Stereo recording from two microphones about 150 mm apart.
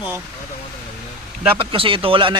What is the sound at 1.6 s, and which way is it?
Speech, 35° right (ahead or behind).